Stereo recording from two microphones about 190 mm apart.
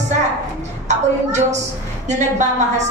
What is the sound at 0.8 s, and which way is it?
A woman's voice, 40° right (ahead or behind).